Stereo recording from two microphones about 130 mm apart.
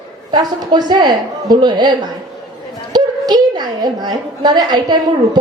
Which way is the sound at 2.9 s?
35° right (ahead or behind).